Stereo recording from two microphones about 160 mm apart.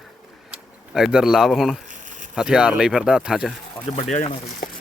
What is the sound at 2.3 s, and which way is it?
Speech, 5° right (ahead or behind).